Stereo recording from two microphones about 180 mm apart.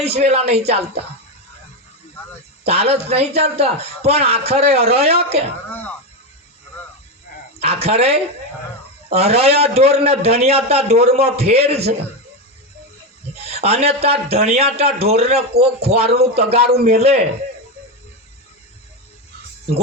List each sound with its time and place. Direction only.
0.0 s a man's voice: 35° right (ahead or behind)
2.6 s a man's voice: 35° right (ahead or behind)
7.6 s a man's voice: 35° right (ahead or behind)
13.4 s a man's voice: 35° right (ahead or behind)